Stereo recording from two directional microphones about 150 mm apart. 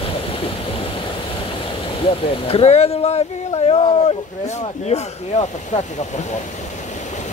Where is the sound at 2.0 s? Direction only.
35° left (ahead or behind).